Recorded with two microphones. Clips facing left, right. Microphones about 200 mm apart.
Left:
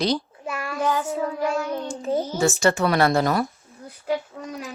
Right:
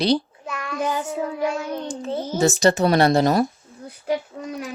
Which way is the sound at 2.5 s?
35° right (ahead or behind).